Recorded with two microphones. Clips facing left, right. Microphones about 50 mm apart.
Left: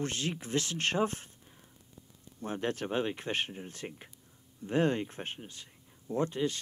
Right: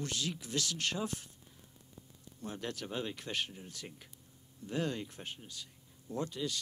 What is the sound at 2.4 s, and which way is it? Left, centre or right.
Speech, left.